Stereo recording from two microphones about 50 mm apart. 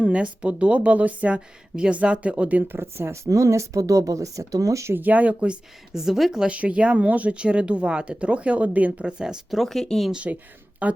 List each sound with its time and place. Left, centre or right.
0.0 s speech: right
1.7 s a woman's voice: centre
2.6 s speech: right
4.9 s speech: right
5.9 s a woman's voice: centre
6.5 s speech: right
9.0 s a woman's voice: centre
9.5 s speech: centre
10.8 s speech: right